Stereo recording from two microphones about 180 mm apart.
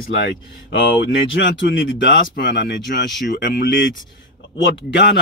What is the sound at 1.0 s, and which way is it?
Speech, 85° left.